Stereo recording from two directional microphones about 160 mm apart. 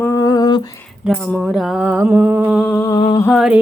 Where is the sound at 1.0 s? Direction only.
Centre (ahead or behind).